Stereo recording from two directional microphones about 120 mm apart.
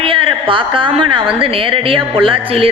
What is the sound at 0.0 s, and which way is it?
A woman's voice, 45° right (ahead or behind).